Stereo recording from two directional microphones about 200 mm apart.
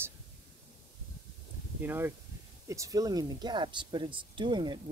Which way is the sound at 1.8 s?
10° right (ahead or behind).